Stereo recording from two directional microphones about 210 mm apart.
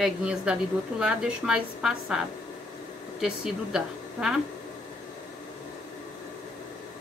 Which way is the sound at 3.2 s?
5° right (ahead or behind).